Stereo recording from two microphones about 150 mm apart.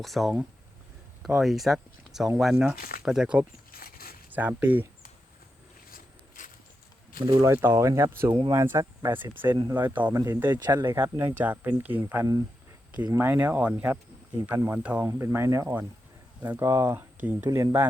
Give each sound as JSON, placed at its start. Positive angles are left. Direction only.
{"t": 0.0, "sound": "speech", "side_deg": 0}
{"t": 2.7, "sound": "speech", "side_deg": 75}
{"t": 3.0, "sound": "speech", "side_deg": -5}
{"t": 3.7, "sound": "a sound", "side_deg": 80}
{"t": 4.3, "sound": "speech", "side_deg": -10}
{"t": 5.9, "sound": "a sound", "side_deg": 60}
{"t": 7.2, "sound": "speech", "side_deg": -25}
{"t": 8.3, "sound": "speech", "side_deg": -35}
{"t": 8.5, "sound": "speech", "side_deg": -20}
{"t": 10.5, "sound": "speech", "side_deg": -30}
{"t": 10.8, "sound": "speech", "side_deg": -15}